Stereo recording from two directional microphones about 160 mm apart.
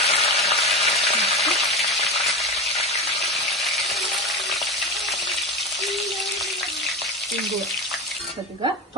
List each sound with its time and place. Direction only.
0.0 s frying: 35° left (ahead or behind)
0.3 s frying: centre (ahead or behind)